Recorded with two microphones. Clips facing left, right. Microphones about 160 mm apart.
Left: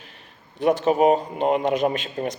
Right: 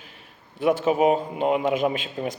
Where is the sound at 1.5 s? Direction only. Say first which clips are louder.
Left 1 dB; 5° right (ahead or behind).